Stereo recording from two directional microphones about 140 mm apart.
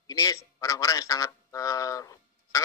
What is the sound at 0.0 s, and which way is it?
A man's voice, 25° left (ahead or behind).